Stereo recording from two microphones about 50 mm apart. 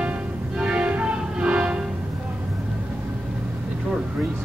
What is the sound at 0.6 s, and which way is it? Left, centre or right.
Music, right.